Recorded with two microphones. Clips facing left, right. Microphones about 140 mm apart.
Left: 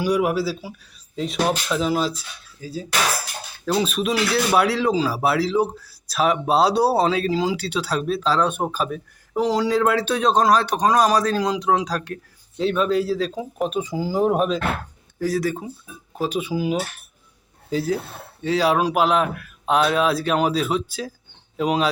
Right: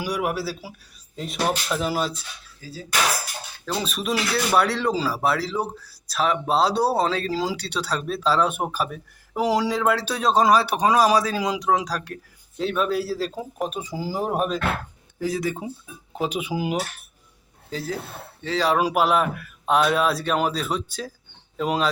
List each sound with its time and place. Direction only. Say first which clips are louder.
0.0 s speech: left 6 dB; centre (ahead or behind)
2.6 s speech: left 7 dB; 15° left (ahead or behind)
3.7 s speech: left 5 dB; centre (ahead or behind)
15.2 s speech: left 3 dB; 15° right (ahead or behind)
17.7 s speech: left 7 dB; 10° left (ahead or behind)
18.8 s speech: left 1 dB; 5° right (ahead or behind)